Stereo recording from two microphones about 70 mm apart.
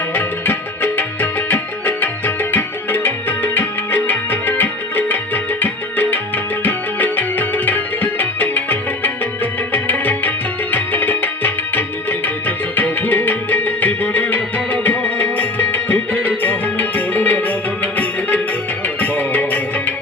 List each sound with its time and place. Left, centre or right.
0.1 s music: left
18.9 s music: left